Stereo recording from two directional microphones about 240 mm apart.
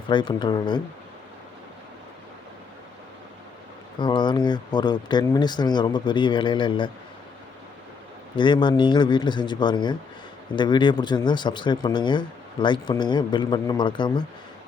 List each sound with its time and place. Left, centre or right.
0.1 s speech: centre
3.9 s speech: centre
8.4 s speech: centre